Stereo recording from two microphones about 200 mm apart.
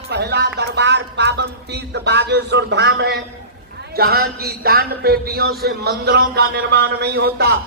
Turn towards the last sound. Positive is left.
turn(degrees=-55)  # may be behind; listen again after turning